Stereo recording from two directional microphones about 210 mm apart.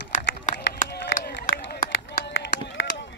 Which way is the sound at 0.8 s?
50° left (ahead or behind).